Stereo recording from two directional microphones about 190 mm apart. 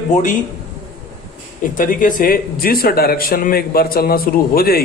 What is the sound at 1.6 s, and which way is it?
A man's voice, 45° left (ahead or behind).